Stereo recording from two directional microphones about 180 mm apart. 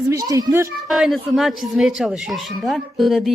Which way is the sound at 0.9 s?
Centre (ahead or behind).